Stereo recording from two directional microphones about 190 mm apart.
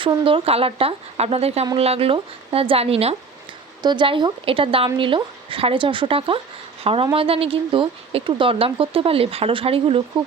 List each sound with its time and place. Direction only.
0.0 s speech: 25° right (ahead or behind)